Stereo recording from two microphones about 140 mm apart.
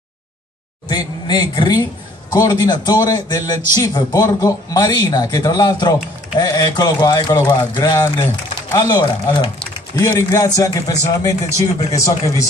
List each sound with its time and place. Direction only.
0.8 s a man's voice: 30° left (ahead or behind)